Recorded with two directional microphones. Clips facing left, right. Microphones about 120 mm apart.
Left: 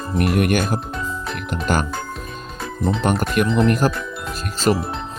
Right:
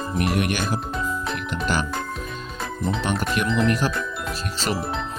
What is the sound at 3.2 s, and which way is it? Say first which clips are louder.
Speech: left 4 dB; 45° left (ahead or behind).